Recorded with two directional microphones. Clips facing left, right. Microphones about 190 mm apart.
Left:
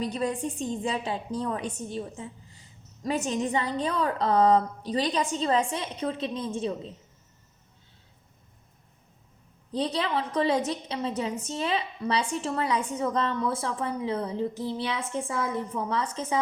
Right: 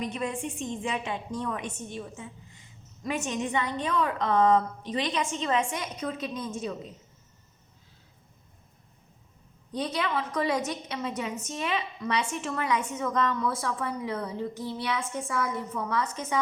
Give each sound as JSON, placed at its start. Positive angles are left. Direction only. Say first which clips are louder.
{"t": 0.0, "sound": "a woman's voice", "louder": "left 3 dB", "side_deg": 35}
{"t": 9.7, "sound": "a woman's voice", "louder": "left 2 dB", "side_deg": 30}